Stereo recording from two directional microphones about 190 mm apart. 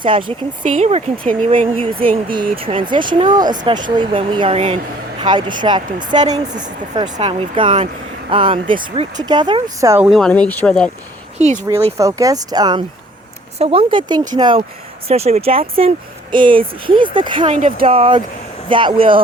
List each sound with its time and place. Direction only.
0.0 s speech: 25° right (ahead or behind)
9.8 s speech: 15° right (ahead or behind)
10.1 s speech: 5° left (ahead or behind)
11.3 s speech: 35° right (ahead or behind)
11.9 s speech: 15° right (ahead or behind)
17.4 s speech: 40° right (ahead or behind)